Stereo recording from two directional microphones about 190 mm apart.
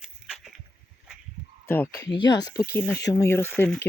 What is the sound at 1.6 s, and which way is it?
Speech, 10° left (ahead or behind).